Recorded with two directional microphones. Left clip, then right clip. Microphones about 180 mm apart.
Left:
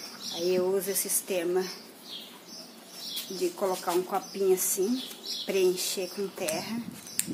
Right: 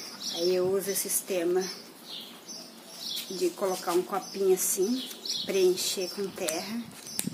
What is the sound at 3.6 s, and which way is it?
Speech, 5° left (ahead or behind).